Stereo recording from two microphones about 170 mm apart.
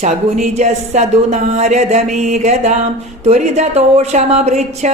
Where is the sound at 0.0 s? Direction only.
45° right (ahead or behind).